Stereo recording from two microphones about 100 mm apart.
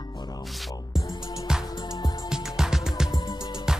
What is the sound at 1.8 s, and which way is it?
Music, 45° left (ahead or behind).